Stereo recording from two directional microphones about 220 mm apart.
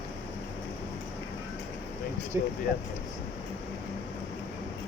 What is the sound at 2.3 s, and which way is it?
Speech, 10° right (ahead or behind).